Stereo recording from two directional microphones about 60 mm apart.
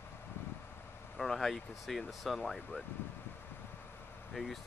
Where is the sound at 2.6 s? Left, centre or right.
Left.